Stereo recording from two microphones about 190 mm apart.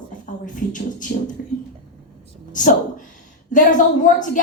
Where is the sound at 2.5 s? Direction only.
45° left (ahead or behind).